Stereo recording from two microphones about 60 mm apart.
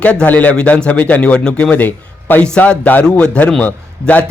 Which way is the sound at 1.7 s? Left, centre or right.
Left.